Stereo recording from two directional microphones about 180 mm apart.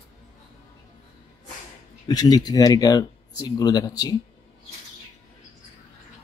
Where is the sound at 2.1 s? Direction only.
20° left (ahead or behind).